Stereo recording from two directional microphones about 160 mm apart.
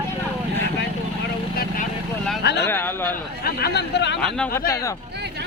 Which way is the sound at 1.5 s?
60° left (ahead or behind).